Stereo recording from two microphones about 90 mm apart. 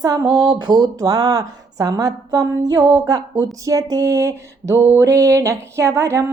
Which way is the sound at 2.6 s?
45° right (ahead or behind).